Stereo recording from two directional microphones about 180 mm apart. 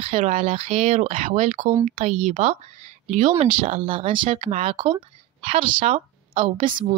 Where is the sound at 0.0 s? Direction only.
40° right (ahead or behind).